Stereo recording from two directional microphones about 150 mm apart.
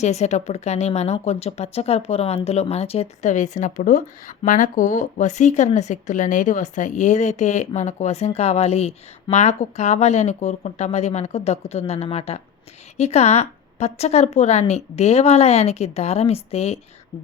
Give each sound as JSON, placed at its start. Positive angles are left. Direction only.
{"t": 0.0, "sound": "speech", "side_deg": 50}